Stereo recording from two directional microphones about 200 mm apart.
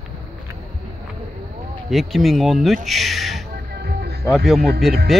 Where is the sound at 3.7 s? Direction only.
50° right (ahead or behind).